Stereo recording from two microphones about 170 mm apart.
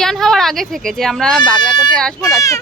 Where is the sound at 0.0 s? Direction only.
Centre (ahead or behind).